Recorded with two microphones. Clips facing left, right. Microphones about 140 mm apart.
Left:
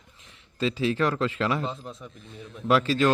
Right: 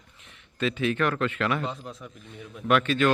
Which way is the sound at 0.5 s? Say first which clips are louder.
Left 1 dB; 30° left (ahead or behind).